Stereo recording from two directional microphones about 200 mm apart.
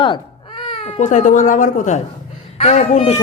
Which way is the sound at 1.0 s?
40° left (ahead or behind).